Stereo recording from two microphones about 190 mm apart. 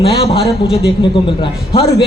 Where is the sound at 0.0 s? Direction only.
30° left (ahead or behind).